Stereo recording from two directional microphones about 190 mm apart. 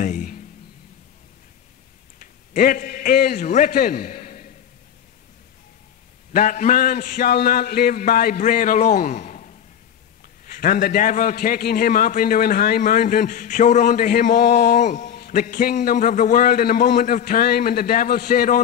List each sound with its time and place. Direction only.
0.0 s a sound: 40° left (ahead or behind)
2.1 s a man's voice: 45° left (ahead or behind)
6.3 s a man's voice: 40° left (ahead or behind)